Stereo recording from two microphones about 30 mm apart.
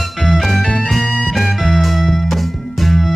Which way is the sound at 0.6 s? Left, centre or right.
Left.